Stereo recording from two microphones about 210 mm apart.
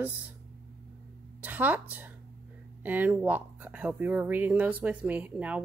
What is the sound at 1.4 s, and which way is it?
A woman's voice, 10° right (ahead or behind).